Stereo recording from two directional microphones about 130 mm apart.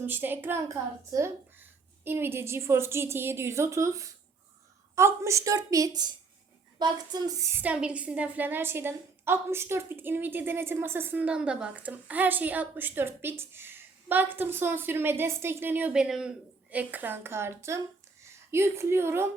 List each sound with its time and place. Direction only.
0.0 s a woman's voice: 15° right (ahead or behind); by 7.4 s 30° right (ahead or behind)
7.6 s a woman's voice: 10° right (ahead or behind)